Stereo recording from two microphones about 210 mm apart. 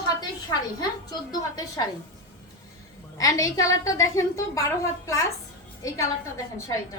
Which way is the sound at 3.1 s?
15° left (ahead or behind).